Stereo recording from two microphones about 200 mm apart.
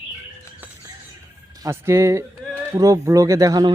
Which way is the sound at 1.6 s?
15° right (ahead or behind).